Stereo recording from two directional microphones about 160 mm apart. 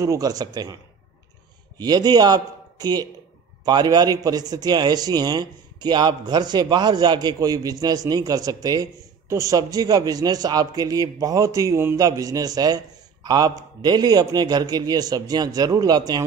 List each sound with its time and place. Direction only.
0.0 s a man's voice: 20° right (ahead or behind)
1.8 s a man's voice: 25° right (ahead or behind)